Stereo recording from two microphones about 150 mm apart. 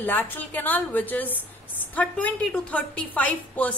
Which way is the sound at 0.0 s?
10° left (ahead or behind).